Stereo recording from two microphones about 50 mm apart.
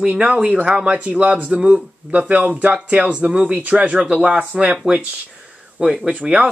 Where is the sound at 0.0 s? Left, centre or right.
Right.